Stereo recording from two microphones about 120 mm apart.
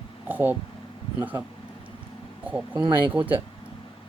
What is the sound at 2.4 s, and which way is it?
Speech, 10° right (ahead or behind).